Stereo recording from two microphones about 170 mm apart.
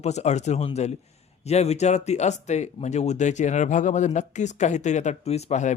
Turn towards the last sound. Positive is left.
turn(degrees=45)  # may be behind; listen again after turning